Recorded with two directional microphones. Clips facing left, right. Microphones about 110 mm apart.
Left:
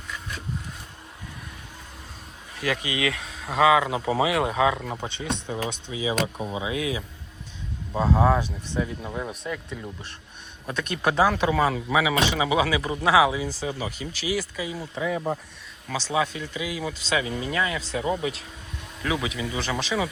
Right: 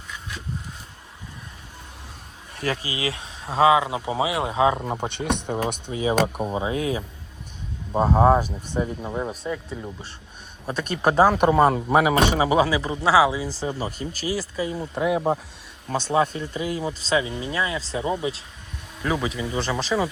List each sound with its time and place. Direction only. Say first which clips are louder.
2.6 s speech: even; 35° right (ahead or behind)
5.0 s speech: right 5 dB; 60° right (ahead or behind); by 7.0 s 40° right (ahead or behind)
8.0 s speech: right 4 dB; 30° right (ahead or behind)
9.0 s speech: right 4 dB; 20° right (ahead or behind)
9.7 s speech: right 2 dB; 35° right (ahead or behind)
13.6 s speech: right 2 dB; 40° right (ahead or behind)
14.9 s speech: right 5 dB; 60° right (ahead or behind)
15.9 s speech: right 4 dB; 45° right (ahead or behind)